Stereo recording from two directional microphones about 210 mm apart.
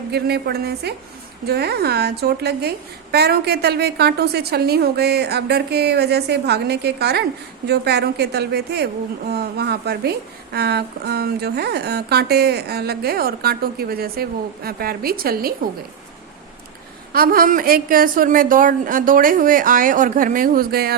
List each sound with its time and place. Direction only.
0.1 s a woman's voice: 50° right (ahead or behind)
17.1 s a woman's voice: 45° right (ahead or behind)